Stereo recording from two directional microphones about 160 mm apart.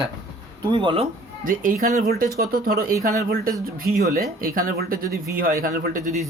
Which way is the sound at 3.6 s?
70° right (ahead or behind).